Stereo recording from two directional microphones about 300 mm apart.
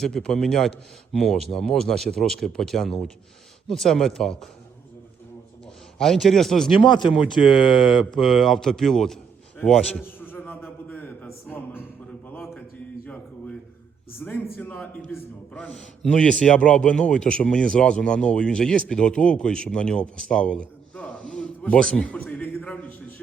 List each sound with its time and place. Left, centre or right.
0.0 s a man's voice: centre
6.0 s a man's voice: centre
6.8 s speech: centre
8.1 s a man's voice: centre
9.6 s a sound: centre
14.2 s a man's voice: centre